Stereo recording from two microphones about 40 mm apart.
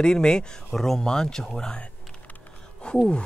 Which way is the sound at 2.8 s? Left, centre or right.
Left.